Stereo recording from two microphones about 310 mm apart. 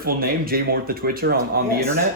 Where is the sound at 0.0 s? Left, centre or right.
Right.